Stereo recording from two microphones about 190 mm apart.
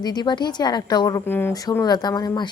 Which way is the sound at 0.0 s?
20° left (ahead or behind).